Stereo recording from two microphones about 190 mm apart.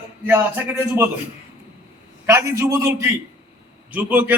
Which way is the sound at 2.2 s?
15° right (ahead or behind).